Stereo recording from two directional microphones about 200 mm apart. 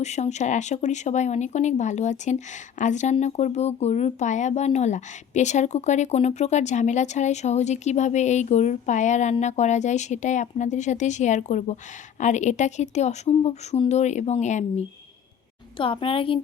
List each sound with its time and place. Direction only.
0.0 s a woman's voice: 35° left (ahead or behind)